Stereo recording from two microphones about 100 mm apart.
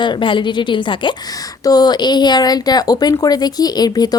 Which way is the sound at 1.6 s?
40° left (ahead or behind).